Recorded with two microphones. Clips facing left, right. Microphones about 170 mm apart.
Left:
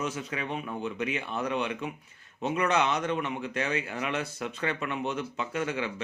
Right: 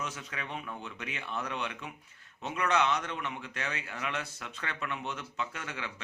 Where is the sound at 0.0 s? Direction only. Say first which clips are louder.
Left 7 dB; 15° left (ahead or behind).